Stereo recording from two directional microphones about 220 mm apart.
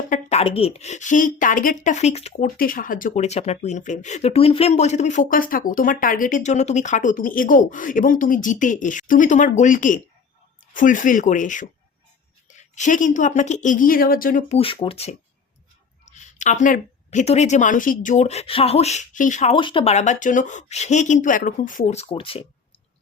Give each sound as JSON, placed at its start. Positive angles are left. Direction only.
{"t": 0.1, "sound": "speech", "side_deg": 30}
{"t": 2.6, "sound": "speech", "side_deg": 40}
{"t": 14.6, "sound": "speech", "side_deg": 25}